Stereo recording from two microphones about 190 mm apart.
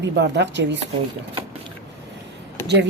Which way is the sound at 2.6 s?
65° right (ahead or behind).